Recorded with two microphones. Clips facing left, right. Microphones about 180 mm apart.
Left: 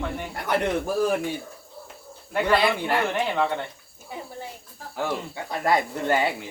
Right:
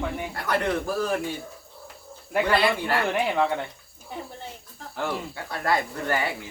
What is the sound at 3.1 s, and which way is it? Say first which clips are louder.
Speech: right 1 dB; 5° right (ahead or behind).